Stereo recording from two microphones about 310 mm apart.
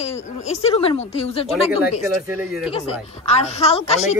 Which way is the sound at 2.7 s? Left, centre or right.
Centre.